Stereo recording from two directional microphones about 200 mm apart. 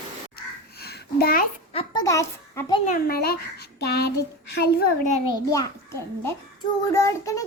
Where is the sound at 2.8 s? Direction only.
45° left (ahead or behind).